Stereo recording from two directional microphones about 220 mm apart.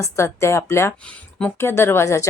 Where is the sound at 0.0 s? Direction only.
10° left (ahead or behind).